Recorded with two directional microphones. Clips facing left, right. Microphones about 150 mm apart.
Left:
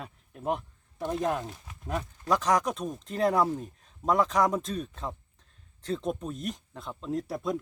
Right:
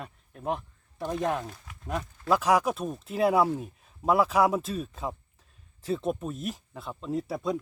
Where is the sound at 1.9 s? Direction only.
5° right (ahead or behind).